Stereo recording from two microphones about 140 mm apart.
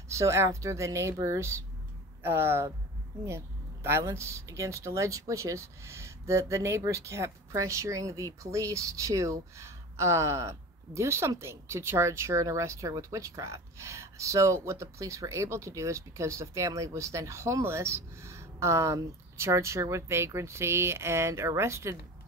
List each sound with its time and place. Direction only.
0.1 s speech: 20° right (ahead or behind)